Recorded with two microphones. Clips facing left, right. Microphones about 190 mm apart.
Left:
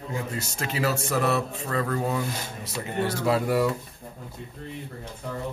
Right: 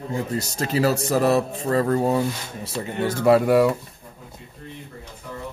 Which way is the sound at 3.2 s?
65° right (ahead or behind).